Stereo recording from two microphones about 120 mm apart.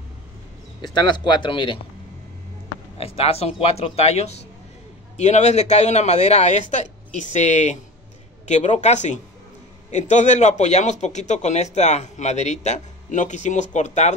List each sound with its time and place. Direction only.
0.7 s speech: 35° left (ahead or behind)
3.0 s a man's voice: 55° left (ahead or behind)
6.7 s a sound: 80° left
7.3 s a man's voice: 75° left (ahead or behind)